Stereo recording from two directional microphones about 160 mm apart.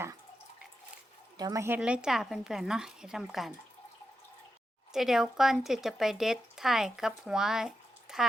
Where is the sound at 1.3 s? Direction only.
20° right (ahead or behind); by 3.5 s centre (ahead or behind).